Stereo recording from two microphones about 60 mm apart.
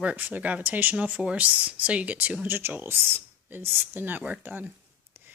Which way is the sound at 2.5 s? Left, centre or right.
Right.